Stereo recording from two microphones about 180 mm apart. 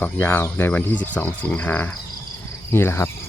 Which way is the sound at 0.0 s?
10° left (ahead or behind).